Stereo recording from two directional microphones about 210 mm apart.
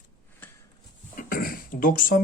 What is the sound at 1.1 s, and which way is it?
Cough, 40° left (ahead or behind).